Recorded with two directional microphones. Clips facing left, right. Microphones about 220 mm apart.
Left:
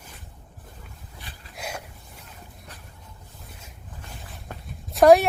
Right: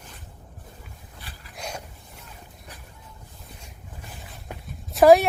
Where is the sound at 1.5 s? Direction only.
5° left (ahead or behind).